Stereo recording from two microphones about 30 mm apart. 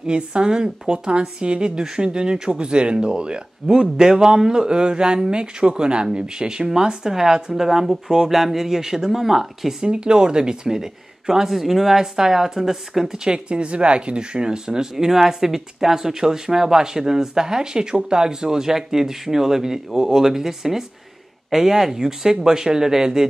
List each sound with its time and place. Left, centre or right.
0.0 s speech: right; by 9.8 s centre
9.8 s speech: right; by 13.2 s centre
13.5 s speech: right; by 23.2 s centre